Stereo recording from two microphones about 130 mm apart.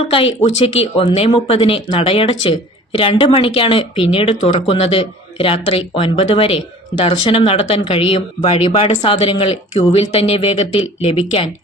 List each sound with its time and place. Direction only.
0.1 s speech: 45° left (ahead or behind)